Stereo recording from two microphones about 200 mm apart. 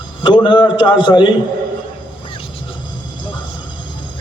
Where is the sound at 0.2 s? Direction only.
25° left (ahead or behind).